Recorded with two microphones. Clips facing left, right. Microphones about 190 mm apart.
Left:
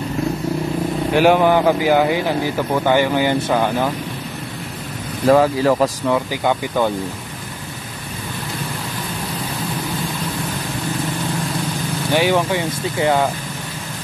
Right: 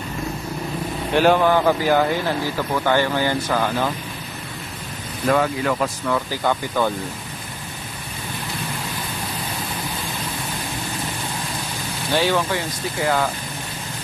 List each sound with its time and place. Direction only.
1.1 s speech: 15° left (ahead or behind)
5.2 s speech: 30° left (ahead or behind)
6.1 s speech: 15° left (ahead or behind)
12.1 s speech: 15° left (ahead or behind)